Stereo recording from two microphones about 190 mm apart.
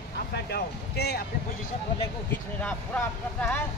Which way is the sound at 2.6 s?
10° left (ahead or behind).